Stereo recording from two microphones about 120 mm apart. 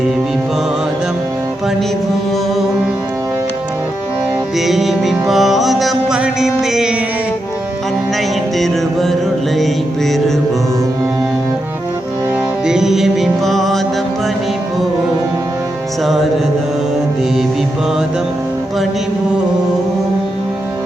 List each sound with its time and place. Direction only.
4.5 s music: centre (ahead or behind)
8.5 s music: centre (ahead or behind)
12.6 s music: 5° right (ahead or behind)